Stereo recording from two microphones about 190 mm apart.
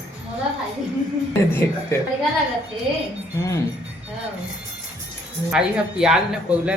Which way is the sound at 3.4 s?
15° left (ahead or behind).